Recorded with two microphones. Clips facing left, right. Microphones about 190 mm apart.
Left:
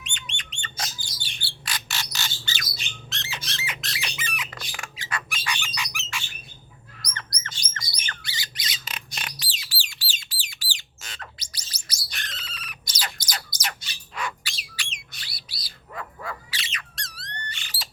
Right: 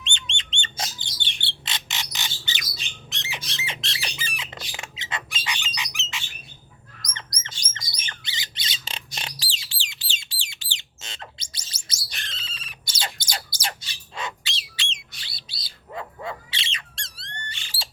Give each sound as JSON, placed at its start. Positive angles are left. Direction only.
{"t": 0.0, "sound": "bird", "side_deg": -25}
{"t": 3.1, "sound": "squawk", "side_deg": -15}
{"t": 3.7, "sound": "squawk", "side_deg": -25}
{"t": 7.1, "sound": "chirp", "side_deg": -20}
{"t": 7.4, "sound": "bird", "side_deg": -20}
{"t": 17.2, "sound": "squeak", "side_deg": -25}